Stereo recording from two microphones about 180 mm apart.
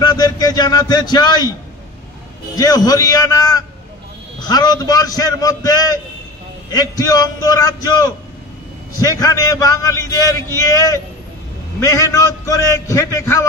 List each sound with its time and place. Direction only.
0.0 s a man's voice: 20° left (ahead or behind)
2.5 s a man's voice: 20° left (ahead or behind)